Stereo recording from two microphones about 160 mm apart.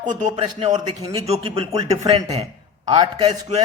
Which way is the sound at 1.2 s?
40° right (ahead or behind).